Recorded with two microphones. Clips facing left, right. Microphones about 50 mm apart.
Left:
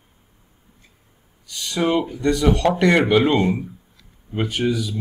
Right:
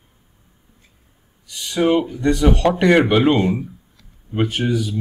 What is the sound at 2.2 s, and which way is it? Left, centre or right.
Speech, right.